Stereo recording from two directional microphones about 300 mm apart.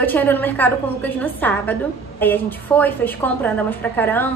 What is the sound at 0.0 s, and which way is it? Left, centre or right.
A woman's voice, centre.